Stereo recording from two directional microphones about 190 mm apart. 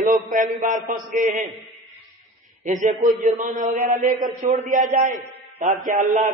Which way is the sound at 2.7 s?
40° right (ahead or behind).